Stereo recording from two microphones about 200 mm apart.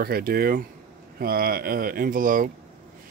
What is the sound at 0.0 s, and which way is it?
Speech, 50° right (ahead or behind).